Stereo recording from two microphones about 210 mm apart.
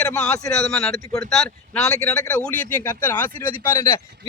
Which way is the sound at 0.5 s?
Centre (ahead or behind).